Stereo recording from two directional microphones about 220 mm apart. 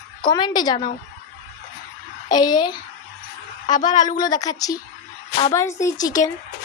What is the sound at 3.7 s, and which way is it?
Speech, 35° left (ahead or behind).